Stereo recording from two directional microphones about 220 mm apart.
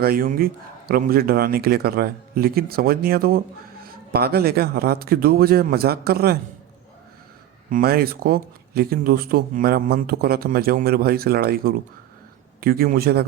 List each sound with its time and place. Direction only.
0.0 s speech: 40° right (ahead or behind)
7.7 s speech: 40° right (ahead or behind)